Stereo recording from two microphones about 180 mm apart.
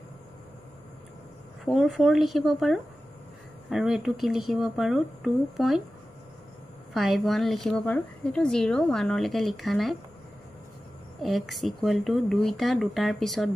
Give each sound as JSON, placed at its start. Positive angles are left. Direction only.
{"t": 1.6, "sound": "speech", "side_deg": 0}
{"t": 6.9, "sound": "speech", "side_deg": 0}
{"t": 11.1, "sound": "speech", "side_deg": 0}